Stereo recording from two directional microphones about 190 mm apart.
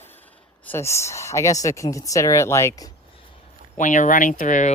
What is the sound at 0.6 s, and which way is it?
Speech, 10° left (ahead or behind).